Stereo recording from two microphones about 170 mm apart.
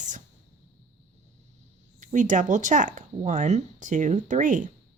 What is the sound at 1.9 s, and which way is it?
A woman's voice, 50° right (ahead or behind).